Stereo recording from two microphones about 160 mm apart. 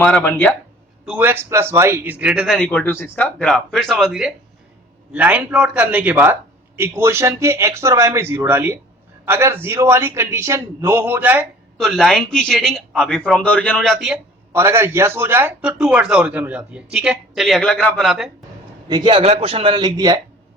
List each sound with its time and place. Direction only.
0.0 s speech: 10° left (ahead or behind)
1.0 s a man's voice: 10° right (ahead or behind)
2.6 s speech: 10° left (ahead or behind)
3.3 s a man's voice: 5° left (ahead or behind)
11.8 s speech: centre (ahead or behind)
14.5 s a man's voice: 15° right (ahead or behind); by 18.3 s centre (ahead or behind)
18.9 s a man's voice: 30° right (ahead or behind)